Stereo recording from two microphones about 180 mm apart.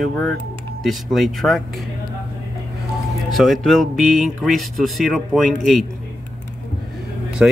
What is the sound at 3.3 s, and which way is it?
Speech, centre (ahead or behind).